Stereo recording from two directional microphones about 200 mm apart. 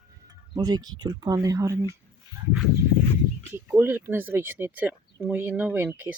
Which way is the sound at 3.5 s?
10° right (ahead or behind).